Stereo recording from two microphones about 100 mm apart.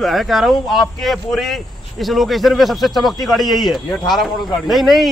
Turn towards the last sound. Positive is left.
turn(degrees=0)  # may be behind; listen again after turning